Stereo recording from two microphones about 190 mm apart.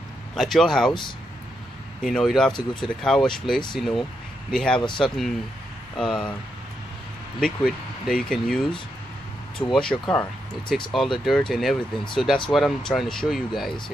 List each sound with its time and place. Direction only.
0.4 s speech: centre (ahead or behind)
2.0 s speech: centre (ahead or behind)
2.5 s speech: 25° left (ahead or behind)
3.0 s speech: 5° left (ahead or behind)
7.3 s speech: 5° left (ahead or behind)